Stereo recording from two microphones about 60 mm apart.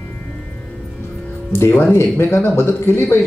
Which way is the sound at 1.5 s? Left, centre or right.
Left.